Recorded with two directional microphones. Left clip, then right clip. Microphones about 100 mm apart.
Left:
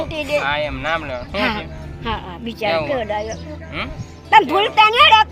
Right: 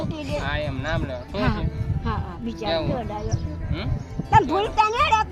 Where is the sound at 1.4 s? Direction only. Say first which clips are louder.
Left 6 dB; 50° right (ahead or behind).